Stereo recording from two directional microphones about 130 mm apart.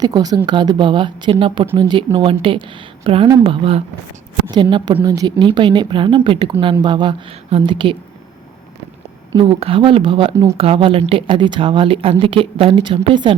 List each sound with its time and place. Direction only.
0.0 s a woman's voice: 30° right (ahead or behind)
9.3 s speech: 45° right (ahead or behind)
10.3 s a woman's voice: 20° right (ahead or behind)
10.6 s speech: 45° right (ahead or behind)